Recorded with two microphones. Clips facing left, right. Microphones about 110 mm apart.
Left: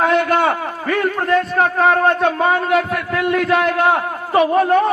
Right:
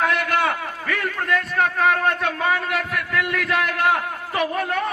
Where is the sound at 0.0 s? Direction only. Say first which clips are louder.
Left 6 dB; 30° left (ahead or behind).